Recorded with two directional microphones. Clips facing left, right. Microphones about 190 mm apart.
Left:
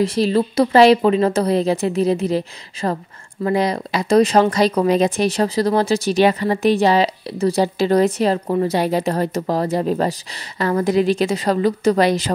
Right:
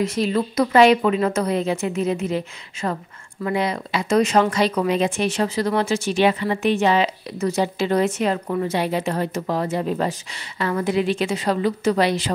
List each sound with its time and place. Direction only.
0.0 s speech: 35° left (ahead or behind)